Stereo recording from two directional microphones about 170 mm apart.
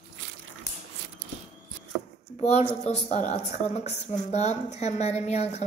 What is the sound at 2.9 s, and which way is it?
A woman's voice, 40° left (ahead or behind).